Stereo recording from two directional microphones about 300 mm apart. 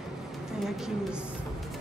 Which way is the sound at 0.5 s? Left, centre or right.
Centre.